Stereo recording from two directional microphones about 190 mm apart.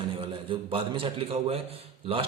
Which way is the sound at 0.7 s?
30° right (ahead or behind).